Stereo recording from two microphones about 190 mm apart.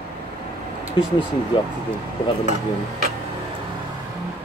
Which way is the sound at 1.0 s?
25° left (ahead or behind).